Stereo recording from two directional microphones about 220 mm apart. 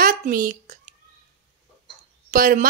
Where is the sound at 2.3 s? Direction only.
40° right (ahead or behind).